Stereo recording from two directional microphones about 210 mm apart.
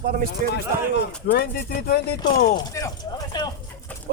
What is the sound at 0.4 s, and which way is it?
Speech, 40° right (ahead or behind).